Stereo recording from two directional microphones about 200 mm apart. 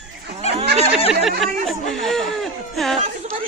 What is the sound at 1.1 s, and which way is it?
Speech, centre (ahead or behind).